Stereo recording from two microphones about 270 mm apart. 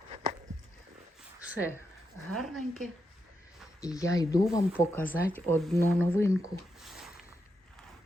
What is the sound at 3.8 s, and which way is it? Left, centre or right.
Speech, centre.